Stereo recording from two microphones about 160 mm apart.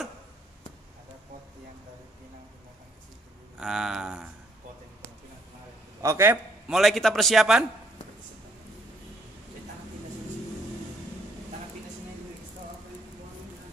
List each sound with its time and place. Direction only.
3.5 s a sound: 5° right (ahead or behind)
6.0 s a man's voice: 15° right (ahead or behind)
6.7 s a man's voice: centre (ahead or behind)